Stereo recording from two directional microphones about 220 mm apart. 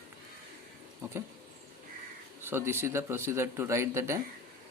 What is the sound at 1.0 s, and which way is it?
Speech, 10° right (ahead or behind).